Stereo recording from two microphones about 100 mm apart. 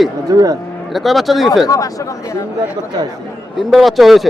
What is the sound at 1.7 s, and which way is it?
Speech, 35° left (ahead or behind).